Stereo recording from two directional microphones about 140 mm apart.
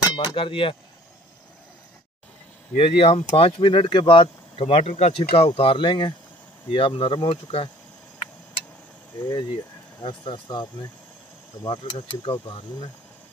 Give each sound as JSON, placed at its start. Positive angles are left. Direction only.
{"t": 0.1, "sound": "speech", "side_deg": 30}
{"t": 2.7, "sound": "speech", "side_deg": 45}
{"t": 9.2, "sound": "speech", "side_deg": 30}